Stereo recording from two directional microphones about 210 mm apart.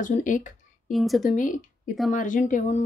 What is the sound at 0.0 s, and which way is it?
Speech, 40° left (ahead or behind).